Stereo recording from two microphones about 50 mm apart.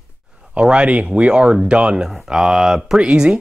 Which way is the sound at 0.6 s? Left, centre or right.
Right.